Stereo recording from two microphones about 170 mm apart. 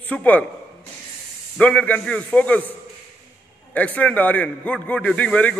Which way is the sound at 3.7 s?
10° left (ahead or behind).